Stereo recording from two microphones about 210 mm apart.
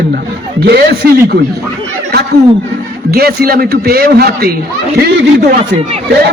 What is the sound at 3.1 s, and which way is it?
A man's voice, 45° right (ahead or behind).